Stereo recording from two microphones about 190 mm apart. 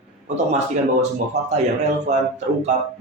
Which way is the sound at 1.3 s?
35° right (ahead or behind).